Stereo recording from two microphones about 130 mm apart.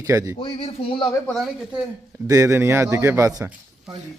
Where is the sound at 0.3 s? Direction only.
40° left (ahead or behind).